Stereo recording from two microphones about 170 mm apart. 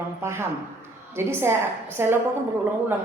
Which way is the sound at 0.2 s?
15° right (ahead or behind).